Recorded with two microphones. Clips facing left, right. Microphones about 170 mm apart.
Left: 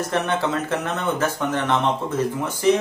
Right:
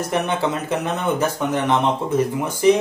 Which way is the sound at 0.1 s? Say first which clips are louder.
Right 2 dB; 15° right (ahead or behind).